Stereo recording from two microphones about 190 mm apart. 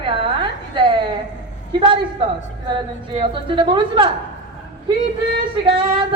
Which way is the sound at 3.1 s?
25° right (ahead or behind).